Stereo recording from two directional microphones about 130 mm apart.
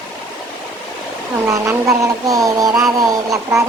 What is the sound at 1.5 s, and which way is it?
Vehicle, 25° right (ahead or behind).